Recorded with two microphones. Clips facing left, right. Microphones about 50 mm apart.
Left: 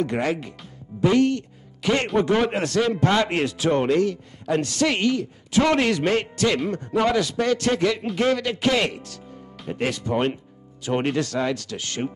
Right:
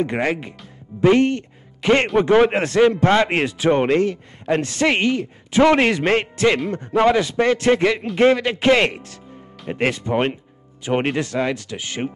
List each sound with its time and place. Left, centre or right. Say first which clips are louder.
0.0 s a man's voice: right 2 dB; right